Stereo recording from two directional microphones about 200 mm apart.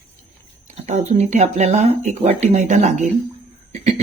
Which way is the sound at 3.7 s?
35° right (ahead or behind).